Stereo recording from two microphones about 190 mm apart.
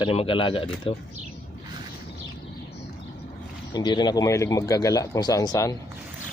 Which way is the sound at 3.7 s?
20° left (ahead or behind).